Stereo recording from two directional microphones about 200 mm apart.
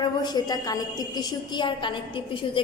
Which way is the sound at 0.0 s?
20° left (ahead or behind).